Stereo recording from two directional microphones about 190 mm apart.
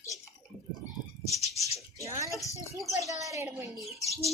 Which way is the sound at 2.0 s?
15° right (ahead or behind).